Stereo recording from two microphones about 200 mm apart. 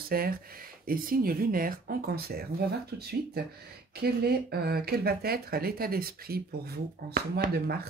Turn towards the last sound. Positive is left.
turn(degrees=-50)  # may be behind; listen again after turning